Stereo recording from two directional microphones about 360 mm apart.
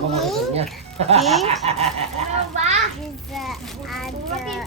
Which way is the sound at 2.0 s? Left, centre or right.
Centre.